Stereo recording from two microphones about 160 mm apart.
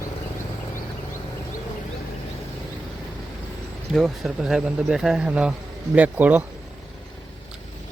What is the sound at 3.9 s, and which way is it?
Speech, centre (ahead or behind).